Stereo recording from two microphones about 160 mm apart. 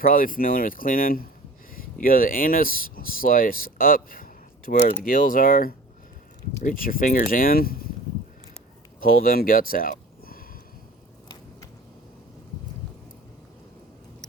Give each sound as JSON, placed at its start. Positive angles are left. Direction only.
{"t": 0.0, "sound": "speech", "side_deg": 60}
{"t": 9.0, "sound": "speech", "side_deg": 65}